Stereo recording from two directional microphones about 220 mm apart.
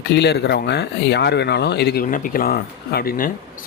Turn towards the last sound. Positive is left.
turn(degrees=40)  # may be behind; listen again after turning